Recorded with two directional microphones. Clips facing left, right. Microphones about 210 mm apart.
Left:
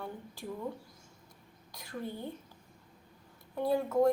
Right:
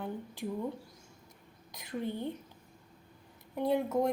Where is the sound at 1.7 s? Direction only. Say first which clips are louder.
Right 5 dB; 20° right (ahead or behind).